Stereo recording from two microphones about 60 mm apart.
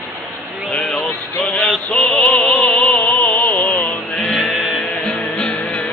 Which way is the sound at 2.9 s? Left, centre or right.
Left.